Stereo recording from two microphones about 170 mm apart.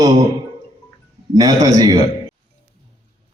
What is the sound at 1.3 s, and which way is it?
Speech, 20° right (ahead or behind).